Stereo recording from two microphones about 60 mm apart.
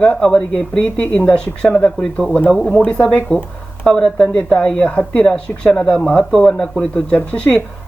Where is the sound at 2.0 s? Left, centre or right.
Centre.